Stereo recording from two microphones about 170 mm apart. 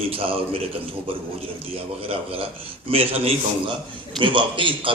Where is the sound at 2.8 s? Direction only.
35° right (ahead or behind).